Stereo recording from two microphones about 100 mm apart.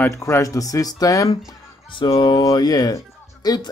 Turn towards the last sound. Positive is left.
turn(degrees=40)  # may be behind; listen again after turning